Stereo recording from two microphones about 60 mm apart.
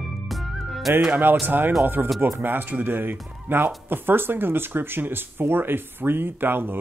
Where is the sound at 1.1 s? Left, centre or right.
Right.